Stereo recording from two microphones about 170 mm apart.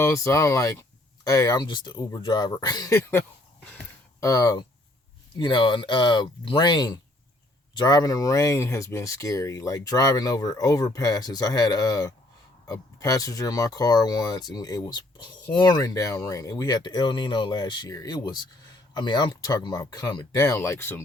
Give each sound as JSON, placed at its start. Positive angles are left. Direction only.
{"t": 0.0, "sound": "speech", "side_deg": 15}
{"t": 3.0, "sound": "a sound", "side_deg": 10}
{"t": 4.3, "sound": "speech", "side_deg": 20}